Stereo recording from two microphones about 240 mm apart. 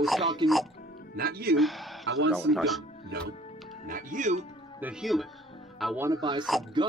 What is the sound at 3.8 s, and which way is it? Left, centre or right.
Speech, right.